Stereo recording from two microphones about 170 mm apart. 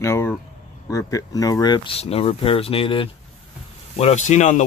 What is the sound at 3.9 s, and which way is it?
Speech, 40° left (ahead or behind).